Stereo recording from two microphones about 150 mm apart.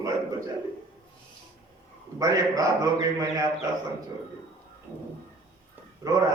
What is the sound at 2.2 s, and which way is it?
A man's voice, 25° right (ahead or behind).